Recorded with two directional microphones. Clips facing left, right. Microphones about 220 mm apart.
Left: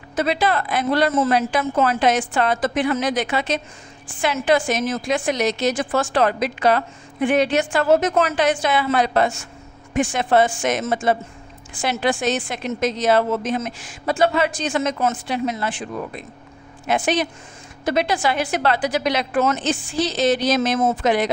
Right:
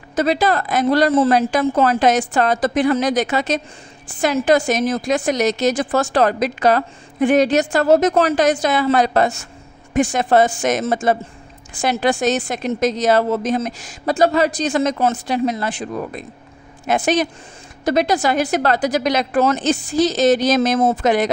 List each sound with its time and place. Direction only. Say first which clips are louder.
0.1 s a woman's voice: right 3 dB; 40° right (ahead or behind)